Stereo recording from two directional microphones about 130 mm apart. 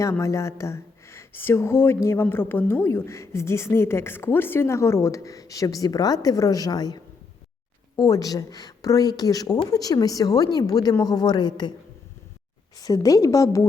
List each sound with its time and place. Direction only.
0.0 s a woman's voice: 25° left (ahead or behind)
12.8 s a woman's voice: 25° left (ahead or behind)